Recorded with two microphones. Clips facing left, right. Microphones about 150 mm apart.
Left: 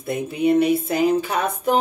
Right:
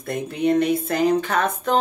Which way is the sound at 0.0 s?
5° left (ahead or behind).